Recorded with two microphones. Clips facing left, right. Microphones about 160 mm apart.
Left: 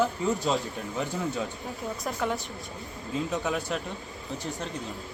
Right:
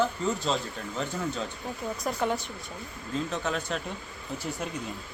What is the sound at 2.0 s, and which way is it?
Speech, centre (ahead or behind).